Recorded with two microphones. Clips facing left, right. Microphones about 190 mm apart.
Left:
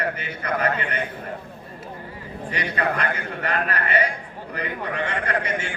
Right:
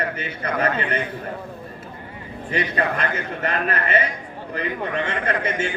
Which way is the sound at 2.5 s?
25° right (ahead or behind).